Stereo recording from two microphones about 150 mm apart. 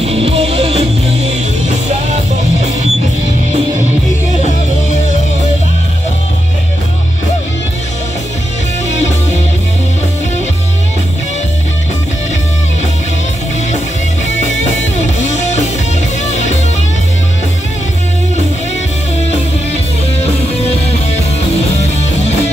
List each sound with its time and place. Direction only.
0.0 s music: 40° right (ahead or behind)
21.5 s music: 45° left (ahead or behind)